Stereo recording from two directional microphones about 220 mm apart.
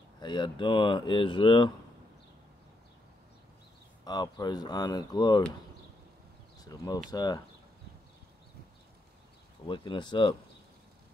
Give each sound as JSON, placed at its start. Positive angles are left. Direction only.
{"t": 0.2, "sound": "speech", "side_deg": 20}
{"t": 4.0, "sound": "speech", "side_deg": 20}
{"t": 6.6, "sound": "speech", "side_deg": 15}
{"t": 9.7, "sound": "speech", "side_deg": 20}